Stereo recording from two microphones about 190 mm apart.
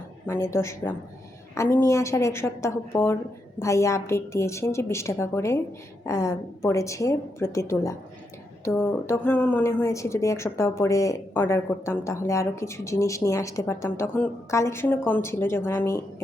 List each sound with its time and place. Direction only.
0.3 s a woman's voice: 15° left (ahead or behind)
8.6 s a woman's voice: 5° left (ahead or behind)